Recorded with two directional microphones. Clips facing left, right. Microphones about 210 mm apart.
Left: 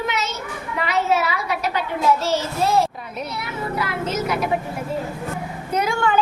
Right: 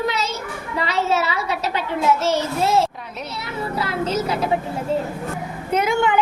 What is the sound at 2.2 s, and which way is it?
A child's voice, 20° right (ahead or behind).